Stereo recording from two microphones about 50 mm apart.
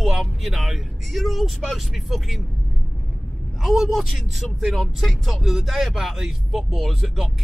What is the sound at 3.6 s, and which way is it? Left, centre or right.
Speech, centre.